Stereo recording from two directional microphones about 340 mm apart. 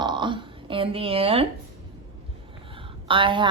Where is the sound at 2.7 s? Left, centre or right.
Centre.